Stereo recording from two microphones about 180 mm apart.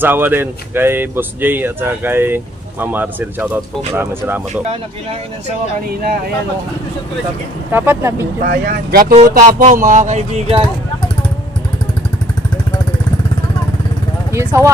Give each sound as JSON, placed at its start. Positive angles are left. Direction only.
{"t": 0.0, "sound": "speech", "side_deg": -10}
{"t": 7.7, "sound": "speech", "side_deg": -10}
{"t": 8.4, "sound": "speech", "side_deg": -55}
{"t": 14.3, "sound": "speech", "side_deg": -15}